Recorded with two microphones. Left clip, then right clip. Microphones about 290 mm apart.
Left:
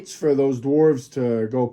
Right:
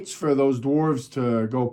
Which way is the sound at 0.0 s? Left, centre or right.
Right.